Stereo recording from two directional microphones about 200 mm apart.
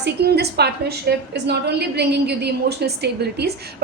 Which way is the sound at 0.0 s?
55° right (ahead or behind).